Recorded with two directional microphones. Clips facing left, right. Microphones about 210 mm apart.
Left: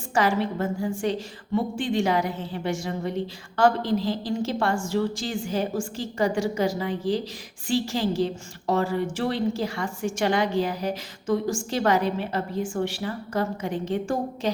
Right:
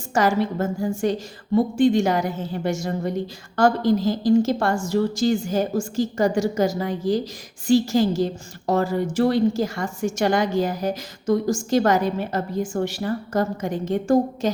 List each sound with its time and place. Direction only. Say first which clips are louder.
0.1 s a woman's voice: right 3 dB; 45° right (ahead or behind)